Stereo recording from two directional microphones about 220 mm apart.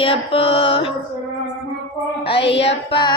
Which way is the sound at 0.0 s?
25° left (ahead or behind).